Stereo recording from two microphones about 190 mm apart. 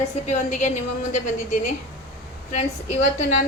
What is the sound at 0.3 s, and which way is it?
Speech, 40° left (ahead or behind).